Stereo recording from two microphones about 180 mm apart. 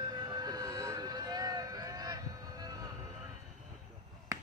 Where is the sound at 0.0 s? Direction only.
20° right (ahead or behind).